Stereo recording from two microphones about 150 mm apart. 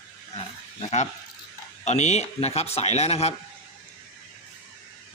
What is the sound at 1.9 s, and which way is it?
Speech, 50° left (ahead or behind).